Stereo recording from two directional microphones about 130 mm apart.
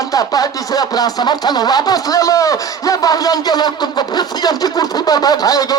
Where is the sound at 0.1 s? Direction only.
30° left (ahead or behind).